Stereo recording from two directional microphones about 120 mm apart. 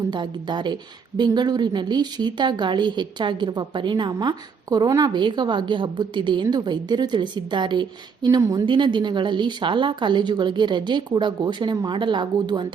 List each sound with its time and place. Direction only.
0.1 s a woman's voice: 40° right (ahead or behind)
8.6 s a woman's voice: 40° right (ahead or behind)